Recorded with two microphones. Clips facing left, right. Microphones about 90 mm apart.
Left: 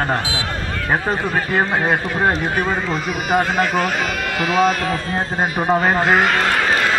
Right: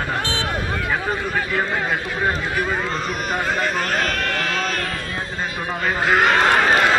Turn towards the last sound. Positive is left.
turn(degrees=0)  # may be behind; listen again after turning